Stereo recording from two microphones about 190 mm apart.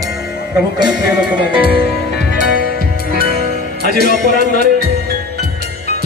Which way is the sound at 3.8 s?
55° right (ahead or behind).